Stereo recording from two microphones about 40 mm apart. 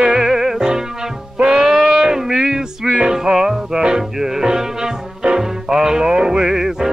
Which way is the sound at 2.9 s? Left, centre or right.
Centre.